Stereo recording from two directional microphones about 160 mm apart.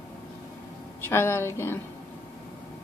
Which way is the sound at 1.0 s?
15° left (ahead or behind).